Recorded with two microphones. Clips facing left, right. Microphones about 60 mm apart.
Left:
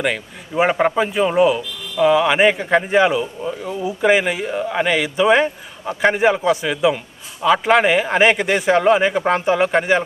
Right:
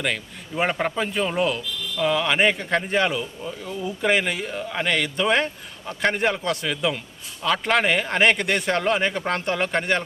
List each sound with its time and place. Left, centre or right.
0.0 s speech: centre
5.8 s a man's voice: left
6.1 s speech: centre